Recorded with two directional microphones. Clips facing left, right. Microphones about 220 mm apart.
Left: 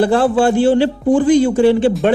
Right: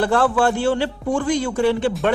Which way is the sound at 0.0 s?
30° left (ahead or behind).